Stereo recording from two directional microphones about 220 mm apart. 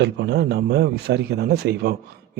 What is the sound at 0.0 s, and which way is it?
Speech, 50° right (ahead or behind).